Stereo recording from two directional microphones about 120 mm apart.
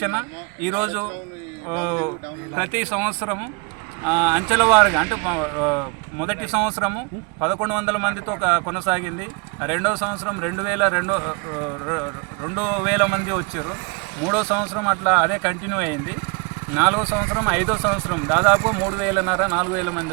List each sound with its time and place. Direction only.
0.0 s speech: 15° right (ahead or behind)
12.5 s speech: 5° right (ahead or behind)